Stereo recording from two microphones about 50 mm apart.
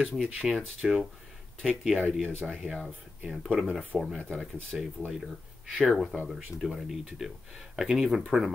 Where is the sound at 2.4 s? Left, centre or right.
Centre.